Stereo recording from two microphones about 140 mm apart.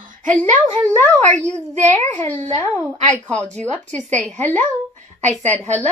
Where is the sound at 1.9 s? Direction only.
15° left (ahead or behind).